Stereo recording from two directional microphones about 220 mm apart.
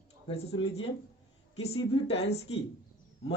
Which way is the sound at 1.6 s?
25° left (ahead or behind).